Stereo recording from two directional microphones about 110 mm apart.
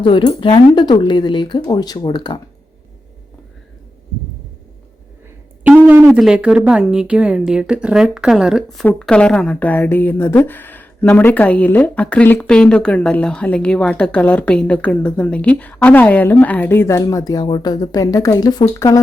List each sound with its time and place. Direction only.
0.0 s speech: 50° left (ahead or behind)
5.6 s a sound: 15° right (ahead or behind)
6.1 s speech: 5° right (ahead or behind)
8.8 s a woman's voice: 10° left (ahead or behind); by 19.0 s 30° left (ahead or behind)